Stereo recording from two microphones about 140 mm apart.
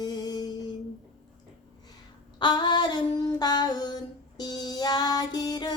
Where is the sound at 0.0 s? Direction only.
30° left (ahead or behind).